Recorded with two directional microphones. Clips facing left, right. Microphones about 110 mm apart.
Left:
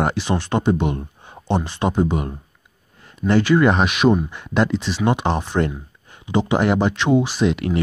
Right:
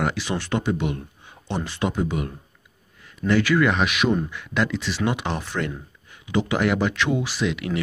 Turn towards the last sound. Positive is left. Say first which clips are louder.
# left 5 dB
turn(degrees=40)  # may be behind; listen again after turning